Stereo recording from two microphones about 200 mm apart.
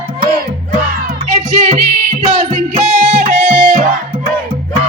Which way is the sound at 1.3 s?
35° right (ahead or behind).